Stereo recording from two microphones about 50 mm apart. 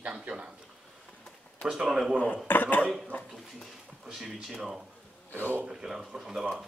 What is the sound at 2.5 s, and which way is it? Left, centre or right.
Speech, left.